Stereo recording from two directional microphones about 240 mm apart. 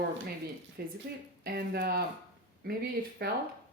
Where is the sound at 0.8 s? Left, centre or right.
Right.